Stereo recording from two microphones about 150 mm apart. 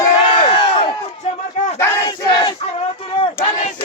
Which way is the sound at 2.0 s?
30° left (ahead or behind).